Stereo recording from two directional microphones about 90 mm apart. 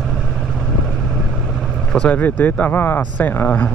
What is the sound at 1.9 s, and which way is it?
Speech, 15° left (ahead or behind).